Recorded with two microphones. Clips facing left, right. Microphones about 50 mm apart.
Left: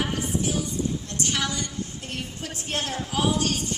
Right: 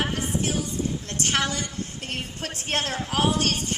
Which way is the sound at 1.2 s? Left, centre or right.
Right.